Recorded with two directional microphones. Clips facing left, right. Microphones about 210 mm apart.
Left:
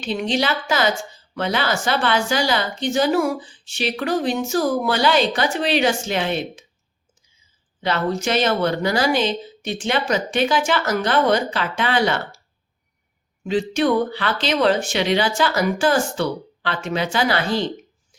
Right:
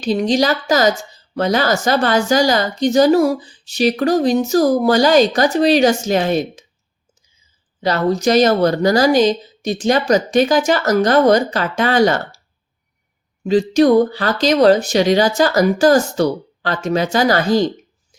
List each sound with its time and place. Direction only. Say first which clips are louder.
0.0 s speech: right 6 dB; 40° right (ahead or behind)
7.8 s speech: right 5 dB; 40° right (ahead or behind)
13.4 s speech: right 7 dB; 40° right (ahead or behind)